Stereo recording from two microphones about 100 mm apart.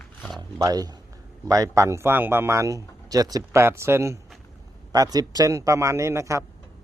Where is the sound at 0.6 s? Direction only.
40° right (ahead or behind).